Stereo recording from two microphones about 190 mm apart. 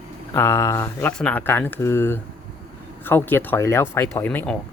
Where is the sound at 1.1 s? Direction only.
5° left (ahead or behind).